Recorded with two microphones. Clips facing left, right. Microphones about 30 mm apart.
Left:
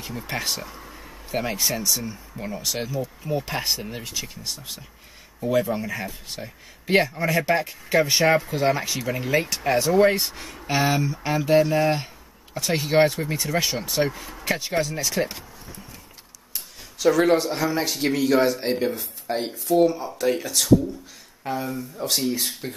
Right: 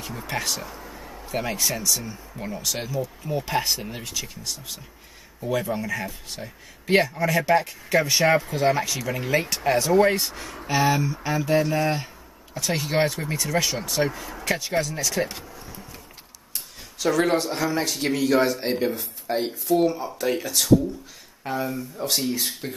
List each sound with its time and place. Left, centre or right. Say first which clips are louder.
0.3 s speech: even; centre
1.0 s a sound: left 1 dB; centre
2.3 s speech: even; centre
5.5 s speech: left 2 dB; centre
11.4 s speech: left 4 dB; left
12.7 s speech: left 4 dB; centre
16.5 s speech: even; centre